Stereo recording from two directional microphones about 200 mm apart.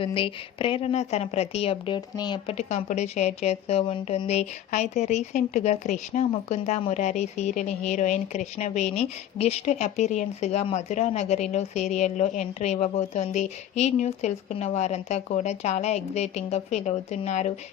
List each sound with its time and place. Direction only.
0.0 s a woman's voice: 25° left (ahead or behind)